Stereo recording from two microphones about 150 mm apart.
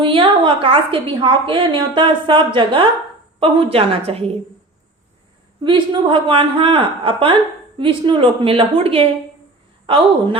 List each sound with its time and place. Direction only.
0.0 s a woman's voice: 35° right (ahead or behind)
5.6 s a woman's voice: 35° right (ahead or behind)